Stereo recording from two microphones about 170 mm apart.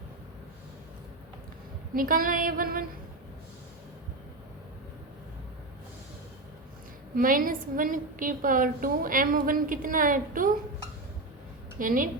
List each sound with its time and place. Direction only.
2.0 s female singing: 55° right (ahead or behind)
7.2 s a woman's voice: 55° right (ahead or behind)
11.8 s a woman's voice: 55° right (ahead or behind)